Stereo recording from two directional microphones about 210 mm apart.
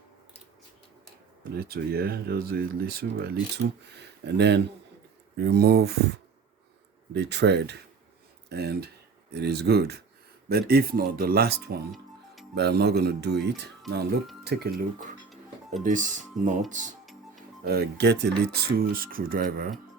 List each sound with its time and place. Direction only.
1.5 s speech: 45° right (ahead or behind)
7.1 s speech: 55° right (ahead or behind)
11.9 s music: centre (ahead or behind)
12.5 s speech: 50° right (ahead or behind)
15.8 s speech: 40° right (ahead or behind)
17.7 s speech: 50° right (ahead or behind)